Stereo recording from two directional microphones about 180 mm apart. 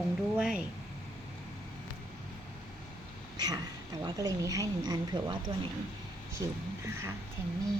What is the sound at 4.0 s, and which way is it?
Speech, 20° right (ahead or behind).